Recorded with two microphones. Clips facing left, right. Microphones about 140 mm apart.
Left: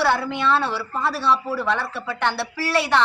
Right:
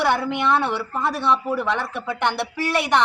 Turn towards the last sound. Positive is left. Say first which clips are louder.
# even
turn(degrees=-15)  # may be behind; listen again after turning